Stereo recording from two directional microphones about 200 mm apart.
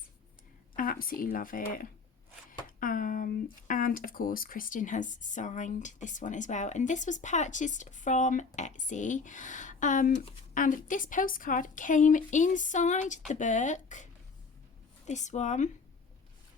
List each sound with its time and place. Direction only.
0.8 s speech: 45° left (ahead or behind)